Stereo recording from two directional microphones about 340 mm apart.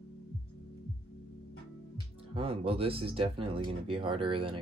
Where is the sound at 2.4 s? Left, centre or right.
Centre.